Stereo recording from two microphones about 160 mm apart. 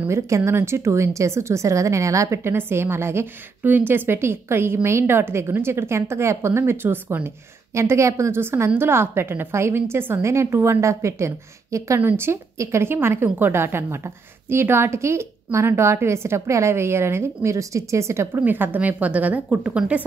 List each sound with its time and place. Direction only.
0.0 s a woman's voice: 15° right (ahead or behind)